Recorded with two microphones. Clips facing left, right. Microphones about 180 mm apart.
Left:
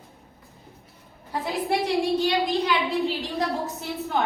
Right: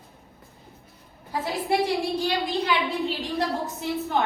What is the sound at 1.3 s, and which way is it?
A woman's voice, centre (ahead or behind).